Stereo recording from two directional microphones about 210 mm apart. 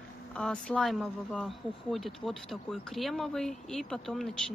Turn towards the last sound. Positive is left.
turn(degrees=0)  # may be behind; listen again after turning